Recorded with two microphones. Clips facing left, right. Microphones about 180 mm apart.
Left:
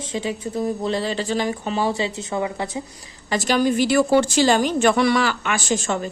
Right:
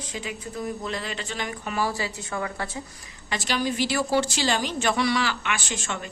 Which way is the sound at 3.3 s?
45° left (ahead or behind).